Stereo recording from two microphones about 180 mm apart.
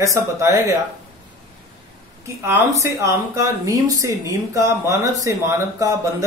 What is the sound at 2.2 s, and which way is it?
Speech, 15° right (ahead or behind).